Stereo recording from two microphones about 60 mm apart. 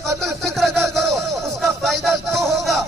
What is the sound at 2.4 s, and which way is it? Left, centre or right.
Music, centre.